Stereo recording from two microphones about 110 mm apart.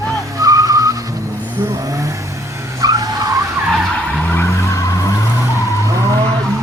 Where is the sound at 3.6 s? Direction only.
Centre (ahead or behind).